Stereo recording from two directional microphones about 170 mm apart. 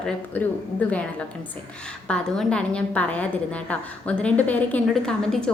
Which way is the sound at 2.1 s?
5° left (ahead or behind).